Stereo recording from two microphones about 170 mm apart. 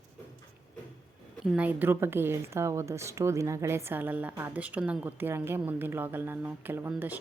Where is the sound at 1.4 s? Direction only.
5° right (ahead or behind).